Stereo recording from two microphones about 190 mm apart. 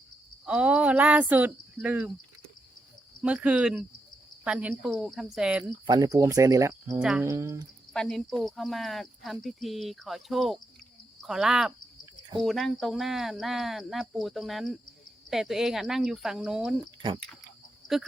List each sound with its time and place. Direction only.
0.4 s speech: 5° right (ahead or behind)
3.2 s speech: 5° right (ahead or behind)
5.8 s speech: 20° right (ahead or behind)
7.9 s speech: centre (ahead or behind)